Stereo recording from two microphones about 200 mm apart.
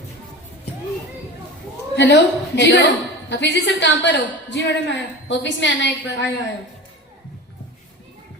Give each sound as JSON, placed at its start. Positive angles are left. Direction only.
{"t": 2.0, "sound": "a woman's voice", "side_deg": 60}